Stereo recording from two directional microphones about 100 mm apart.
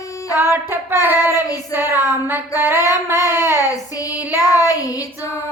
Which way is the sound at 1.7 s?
20° right (ahead or behind).